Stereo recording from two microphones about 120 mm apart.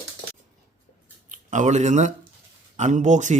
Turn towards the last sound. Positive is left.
turn(degrees=-90)